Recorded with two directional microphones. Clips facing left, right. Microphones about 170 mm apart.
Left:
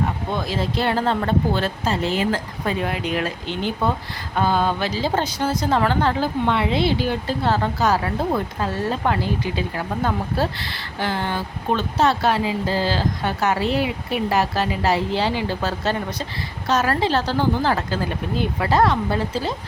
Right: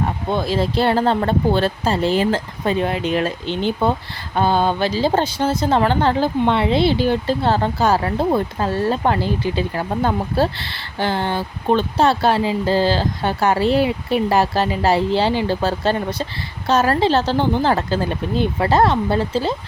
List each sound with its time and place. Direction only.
0.3 s speech: 30° right (ahead or behind)